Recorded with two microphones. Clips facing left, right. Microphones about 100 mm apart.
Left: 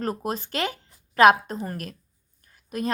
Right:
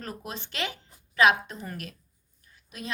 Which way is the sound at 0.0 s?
45° left (ahead or behind).